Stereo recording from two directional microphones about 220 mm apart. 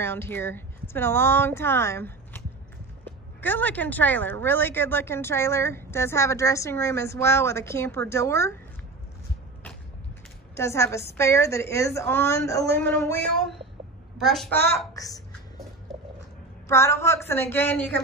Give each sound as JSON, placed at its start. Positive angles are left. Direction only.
{"t": 0.0, "sound": "speech", "side_deg": 10}
{"t": 10.5, "sound": "a woman's voice", "side_deg": 10}
{"t": 15.9, "sound": "a sound", "side_deg": 0}
{"t": 16.6, "sound": "speech", "side_deg": 10}